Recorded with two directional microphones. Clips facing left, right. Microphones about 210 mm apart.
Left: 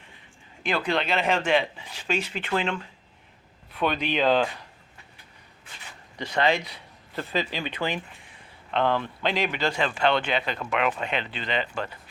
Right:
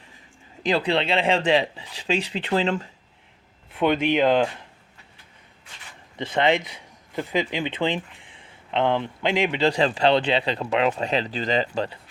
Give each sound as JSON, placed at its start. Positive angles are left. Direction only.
{"t": 0.6, "sound": "speech", "side_deg": -35}
{"t": 4.2, "sound": "speech", "side_deg": -20}
{"t": 6.1, "sound": "speech", "side_deg": -25}